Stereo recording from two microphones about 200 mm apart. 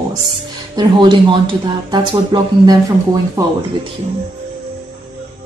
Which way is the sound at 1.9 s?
20° right (ahead or behind).